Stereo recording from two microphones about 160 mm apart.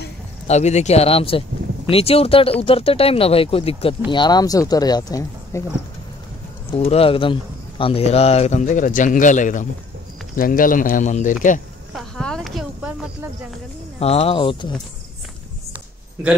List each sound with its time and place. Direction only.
0.5 s speech: 45° left (ahead or behind); by 5.6 s 20° left (ahead or behind)
6.7 s speech: 40° left (ahead or behind)
11.9 s a sound: 5° left (ahead or behind)
13.9 s speech: 40° left (ahead or behind)